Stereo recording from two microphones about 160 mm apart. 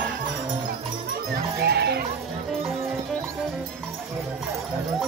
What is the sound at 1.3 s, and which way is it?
Sheep, 90° right.